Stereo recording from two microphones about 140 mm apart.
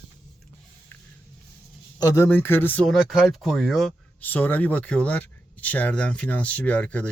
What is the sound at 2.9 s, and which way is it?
Speech, 5° right (ahead or behind).